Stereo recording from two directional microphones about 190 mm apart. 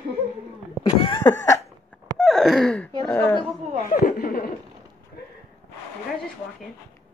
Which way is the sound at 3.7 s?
50° left (ahead or behind).